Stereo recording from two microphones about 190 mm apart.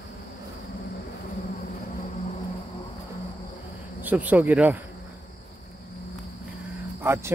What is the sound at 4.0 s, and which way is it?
Speech, 10° right (ahead or behind).